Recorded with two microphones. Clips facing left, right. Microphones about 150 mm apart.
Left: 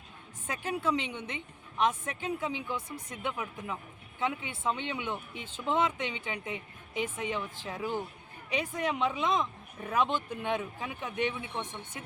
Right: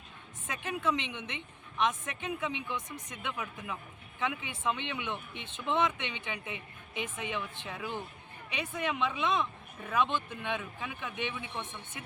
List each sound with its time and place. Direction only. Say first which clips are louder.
0.4 s speech: left 1 dB; 35° left (ahead or behind)
11.6 s speech: left 3 dB; 10° left (ahead or behind)